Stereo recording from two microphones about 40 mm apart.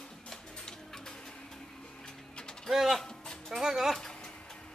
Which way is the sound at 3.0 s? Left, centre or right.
Centre.